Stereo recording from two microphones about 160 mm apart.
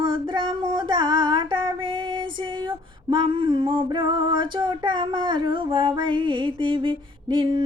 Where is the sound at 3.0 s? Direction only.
30° right (ahead or behind).